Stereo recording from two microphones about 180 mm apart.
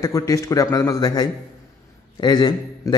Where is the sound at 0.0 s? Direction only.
15° left (ahead or behind).